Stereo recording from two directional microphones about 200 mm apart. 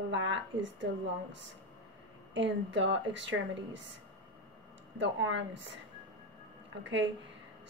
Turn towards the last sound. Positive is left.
turn(degrees=-65)  # may be behind; listen again after turning